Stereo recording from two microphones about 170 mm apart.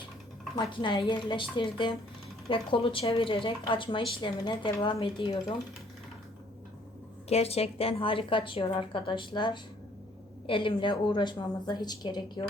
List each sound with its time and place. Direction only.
0.5 s speech: 25° left (ahead or behind)
7.3 s a woman's voice: 35° left (ahead or behind)